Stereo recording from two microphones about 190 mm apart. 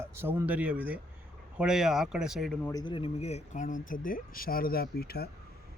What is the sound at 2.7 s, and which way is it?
Speech, 20° left (ahead or behind).